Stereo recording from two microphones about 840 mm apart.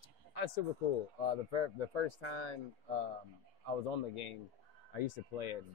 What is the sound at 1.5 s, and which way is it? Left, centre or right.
Speech, left.